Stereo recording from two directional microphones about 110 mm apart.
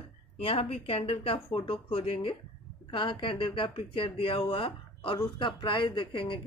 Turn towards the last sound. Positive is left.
turn(degrees=50)  # may be behind; listen again after turning